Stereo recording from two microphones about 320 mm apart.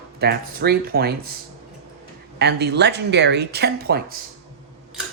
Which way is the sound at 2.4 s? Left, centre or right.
Right.